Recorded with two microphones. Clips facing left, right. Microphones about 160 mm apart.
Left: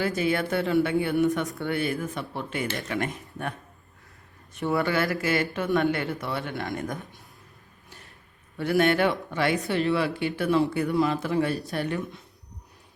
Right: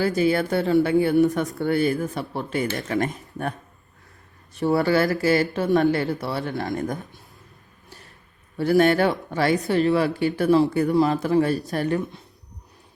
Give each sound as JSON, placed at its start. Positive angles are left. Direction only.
{"t": 0.0, "sound": "speech", "side_deg": -35}
{"t": 4.5, "sound": "speech", "side_deg": -35}
{"t": 8.5, "sound": "speech", "side_deg": -40}